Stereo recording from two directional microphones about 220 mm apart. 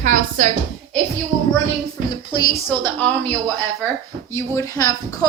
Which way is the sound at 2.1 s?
20° left (ahead or behind).